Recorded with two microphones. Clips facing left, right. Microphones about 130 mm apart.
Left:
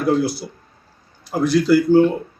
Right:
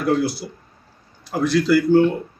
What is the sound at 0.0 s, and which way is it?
Speech, 10° left (ahead or behind).